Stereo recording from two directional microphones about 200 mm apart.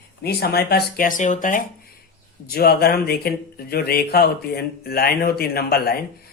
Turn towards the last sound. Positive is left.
turn(degrees=50)  # may be behind; listen again after turning